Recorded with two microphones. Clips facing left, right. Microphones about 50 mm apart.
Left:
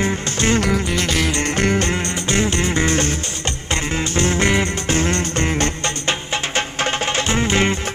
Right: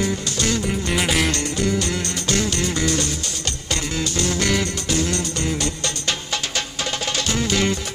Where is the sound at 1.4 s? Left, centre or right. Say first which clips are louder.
Left 4 dB; left.